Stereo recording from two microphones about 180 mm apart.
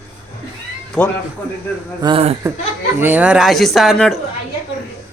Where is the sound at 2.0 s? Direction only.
30° right (ahead or behind).